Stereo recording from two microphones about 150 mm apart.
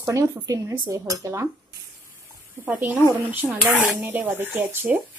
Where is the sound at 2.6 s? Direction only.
10° right (ahead or behind).